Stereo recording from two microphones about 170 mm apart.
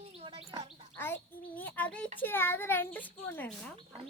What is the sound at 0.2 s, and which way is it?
Bird, 35° right (ahead or behind).